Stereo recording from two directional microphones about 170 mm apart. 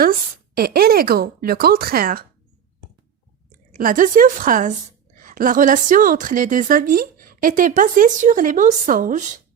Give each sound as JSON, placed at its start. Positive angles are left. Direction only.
{"t": 0.0, "sound": "speech", "side_deg": -60}
{"t": 3.5, "sound": "a woman's voice", "side_deg": -55}